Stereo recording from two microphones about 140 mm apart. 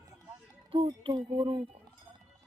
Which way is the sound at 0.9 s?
35° right (ahead or behind).